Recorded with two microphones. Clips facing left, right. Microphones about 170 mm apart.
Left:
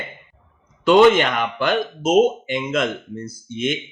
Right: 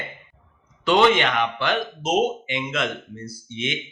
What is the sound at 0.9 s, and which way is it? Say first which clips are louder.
Speech: left 5 dB; 45° left (ahead or behind).